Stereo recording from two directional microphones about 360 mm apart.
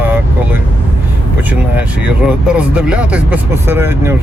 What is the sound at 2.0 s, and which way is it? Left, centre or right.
Speech, centre.